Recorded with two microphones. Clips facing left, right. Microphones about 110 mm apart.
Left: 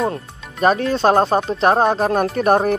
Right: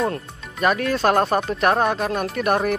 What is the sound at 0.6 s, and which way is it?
Speech, 30° left (ahead or behind).